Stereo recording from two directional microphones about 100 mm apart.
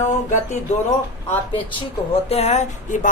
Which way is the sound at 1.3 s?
75° left (ahead or behind).